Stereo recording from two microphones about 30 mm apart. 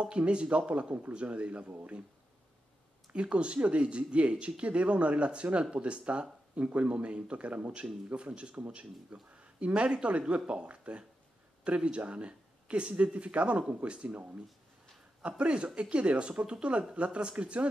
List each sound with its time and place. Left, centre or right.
0.0 s speech: right
3.1 s speech: right
6.6 s speech: right
6.9 s speech: right
15.2 s speech: right